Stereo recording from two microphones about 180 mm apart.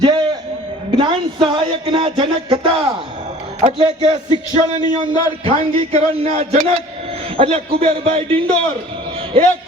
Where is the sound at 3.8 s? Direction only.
25° right (ahead or behind).